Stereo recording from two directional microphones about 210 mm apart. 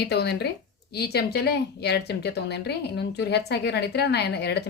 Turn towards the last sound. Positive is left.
turn(degrees=50)  # may be behind; listen again after turning